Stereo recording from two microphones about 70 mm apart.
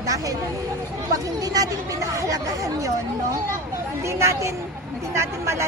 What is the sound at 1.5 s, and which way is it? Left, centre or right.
Speech, right.